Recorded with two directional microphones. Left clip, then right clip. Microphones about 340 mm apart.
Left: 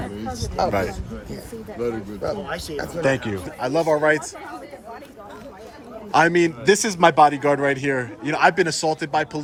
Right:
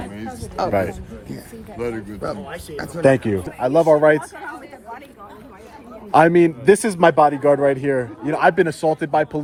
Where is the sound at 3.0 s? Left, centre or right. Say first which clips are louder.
Right 7 dB; centre.